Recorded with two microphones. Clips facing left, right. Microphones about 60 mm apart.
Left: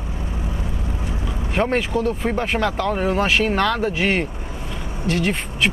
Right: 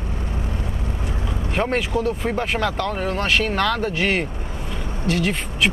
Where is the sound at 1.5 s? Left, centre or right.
Centre.